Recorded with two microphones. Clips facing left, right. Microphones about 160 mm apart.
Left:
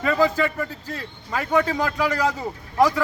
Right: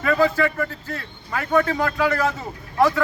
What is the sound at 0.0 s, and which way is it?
A man's voice, 20° left (ahead or behind).